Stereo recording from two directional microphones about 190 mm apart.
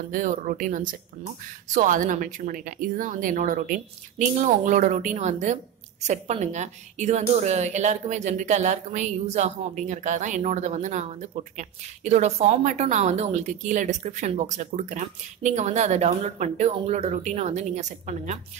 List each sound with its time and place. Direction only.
0.1 s a woman's voice: 45° right (ahead or behind)